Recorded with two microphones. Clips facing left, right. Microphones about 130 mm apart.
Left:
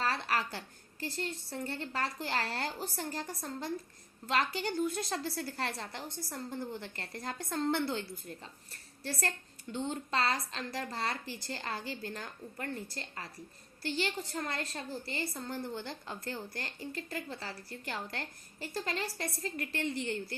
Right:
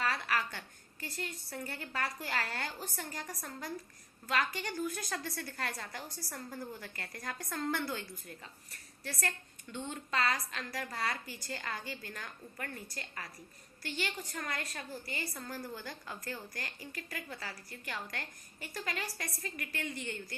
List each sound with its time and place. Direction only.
0.0 s a woman's voice: 30° left (ahead or behind)